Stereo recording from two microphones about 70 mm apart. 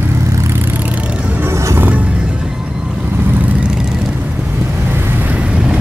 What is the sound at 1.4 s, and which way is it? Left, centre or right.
Music, right.